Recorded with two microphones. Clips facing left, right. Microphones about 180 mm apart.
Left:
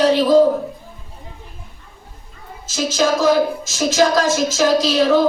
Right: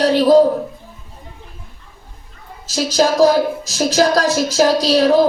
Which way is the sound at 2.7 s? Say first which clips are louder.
Right 3 dB; 35° right (ahead or behind).